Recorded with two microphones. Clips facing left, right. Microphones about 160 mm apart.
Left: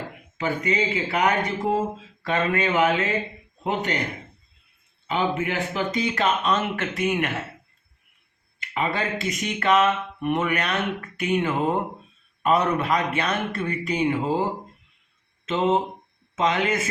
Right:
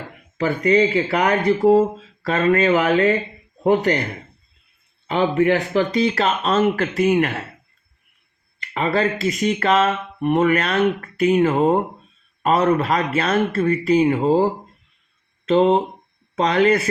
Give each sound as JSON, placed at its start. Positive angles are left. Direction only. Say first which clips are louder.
{"t": 0.3, "sound": "speech", "louder": "right 8 dB", "side_deg": -40}
{"t": 5.3, "sound": "speech", "louder": "right 9 dB", "side_deg": -40}
{"t": 8.8, "sound": "speech", "louder": "right 6 dB", "side_deg": -35}
{"t": 15.4, "sound": "speech", "louder": "right 6 dB", "side_deg": -35}